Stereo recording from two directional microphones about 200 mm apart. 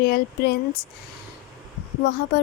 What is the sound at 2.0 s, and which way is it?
Speech, 55° left (ahead or behind).